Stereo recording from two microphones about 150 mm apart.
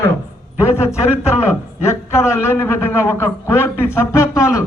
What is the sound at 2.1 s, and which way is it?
A man's voice, 15° left (ahead or behind).